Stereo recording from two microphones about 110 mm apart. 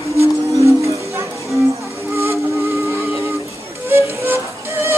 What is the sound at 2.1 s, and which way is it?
Steam whistle, 25° right (ahead or behind).